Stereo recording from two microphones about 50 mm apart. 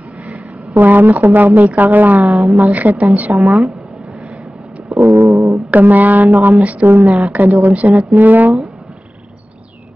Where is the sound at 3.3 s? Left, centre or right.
Right.